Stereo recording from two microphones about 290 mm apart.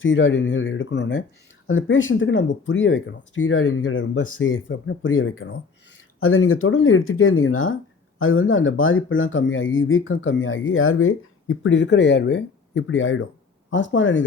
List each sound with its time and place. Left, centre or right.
0.0 s speech: left